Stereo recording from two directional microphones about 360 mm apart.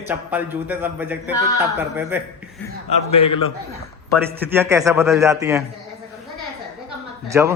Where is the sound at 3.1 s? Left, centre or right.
Centre.